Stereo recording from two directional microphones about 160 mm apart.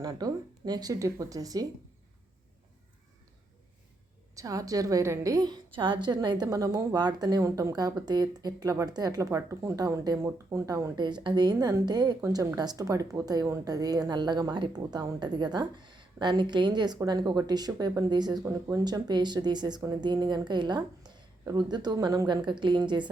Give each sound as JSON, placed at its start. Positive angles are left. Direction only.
{"t": 0.0, "sound": "a woman's voice", "side_deg": -25}
{"t": 4.4, "sound": "a woman's voice", "side_deg": -20}